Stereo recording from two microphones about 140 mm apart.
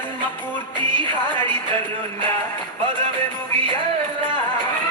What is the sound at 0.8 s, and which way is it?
Music, 35° right (ahead or behind).